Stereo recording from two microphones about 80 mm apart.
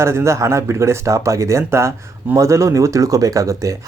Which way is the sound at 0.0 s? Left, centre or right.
Right.